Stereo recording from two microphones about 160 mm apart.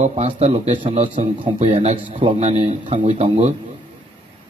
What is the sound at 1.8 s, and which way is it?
Speech, 40° right (ahead or behind).